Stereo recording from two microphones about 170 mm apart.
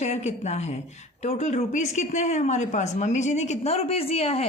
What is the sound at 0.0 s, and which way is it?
Speech, 40° left (ahead or behind).